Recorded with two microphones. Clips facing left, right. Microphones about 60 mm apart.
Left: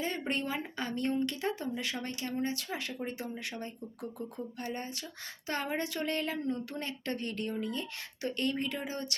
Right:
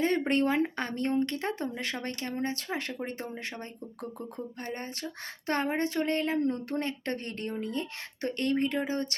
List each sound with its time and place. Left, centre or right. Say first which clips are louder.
0.0 s speech: right 8 dB; right